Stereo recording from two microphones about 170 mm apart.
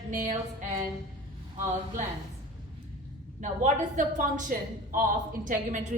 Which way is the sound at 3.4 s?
50° right (ahead or behind).